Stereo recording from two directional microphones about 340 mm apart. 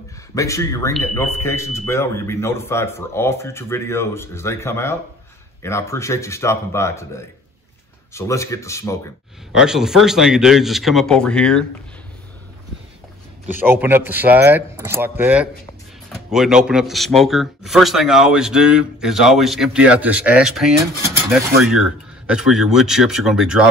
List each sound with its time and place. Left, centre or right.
0.3 s speech: centre
8.1 s speech: centre
13.7 s speech: centre